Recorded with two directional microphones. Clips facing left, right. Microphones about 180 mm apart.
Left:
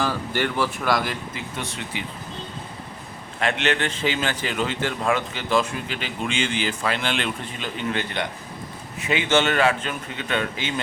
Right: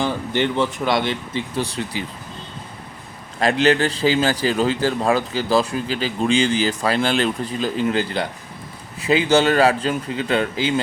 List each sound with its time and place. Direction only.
0.0 s speech: 20° right (ahead or behind)
3.4 s speech: 35° right (ahead or behind)